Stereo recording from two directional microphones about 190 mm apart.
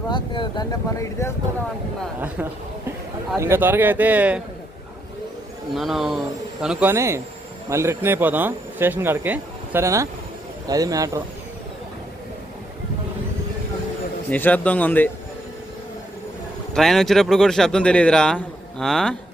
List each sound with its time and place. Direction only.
0.1 s speech: 25° left (ahead or behind)
2.2 s a man's voice: 10° right (ahead or behind)
5.7 s a man's voice: centre (ahead or behind); by 11.2 s 20° right (ahead or behind)
14.3 s speech: 10° left (ahead or behind)
16.7 s speech: centre (ahead or behind)